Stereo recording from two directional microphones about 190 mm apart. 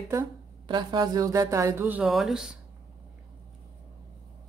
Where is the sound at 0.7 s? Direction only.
20° right (ahead or behind); by 2.5 s centre (ahead or behind).